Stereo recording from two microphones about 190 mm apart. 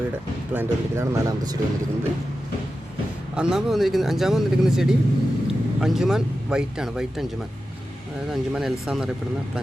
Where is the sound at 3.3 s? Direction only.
5° right (ahead or behind).